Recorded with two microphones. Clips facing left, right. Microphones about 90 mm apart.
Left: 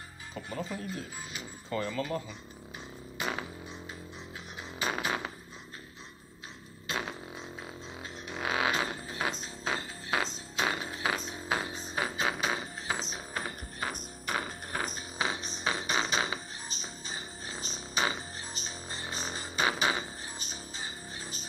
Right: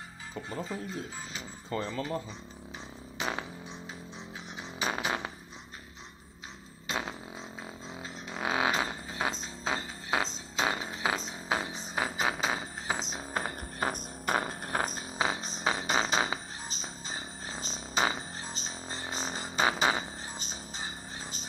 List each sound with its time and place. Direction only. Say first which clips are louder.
0.3 s speech: even; 25° right (ahead or behind)
4.6 s music: right 1 dB; 20° right (ahead or behind)
5.0 s a sound: even; 20° right (ahead or behind)
8.0 s music: right 1 dB; 25° right (ahead or behind)